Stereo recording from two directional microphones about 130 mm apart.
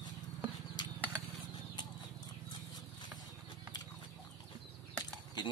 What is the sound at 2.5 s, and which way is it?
Horse, 30° left (ahead or behind).